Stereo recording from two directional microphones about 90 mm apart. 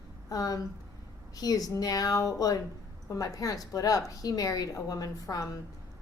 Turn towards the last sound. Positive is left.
turn(degrees=40)  # may be behind; listen again after turning